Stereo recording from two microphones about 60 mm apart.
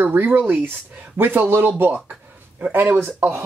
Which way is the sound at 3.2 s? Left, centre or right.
Right.